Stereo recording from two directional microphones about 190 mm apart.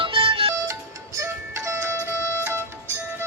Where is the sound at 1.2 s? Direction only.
15° right (ahead or behind).